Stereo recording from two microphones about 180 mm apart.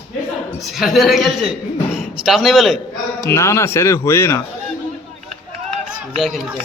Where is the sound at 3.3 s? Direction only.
15° left (ahead or behind).